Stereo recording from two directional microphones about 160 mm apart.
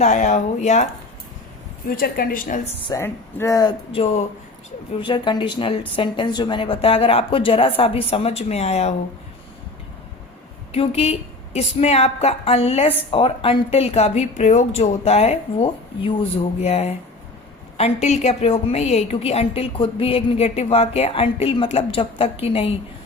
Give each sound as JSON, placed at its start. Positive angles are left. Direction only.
{"t": 0.0, "sound": "speech", "side_deg": 50}
{"t": 2.0, "sound": "a woman's voice", "side_deg": 70}
{"t": 2.8, "sound": "a woman's voice", "side_deg": 20}
{"t": 10.7, "sound": "a woman's voice", "side_deg": 40}